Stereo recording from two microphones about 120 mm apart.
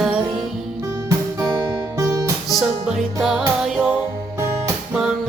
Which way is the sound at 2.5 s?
Centre (ahead or behind).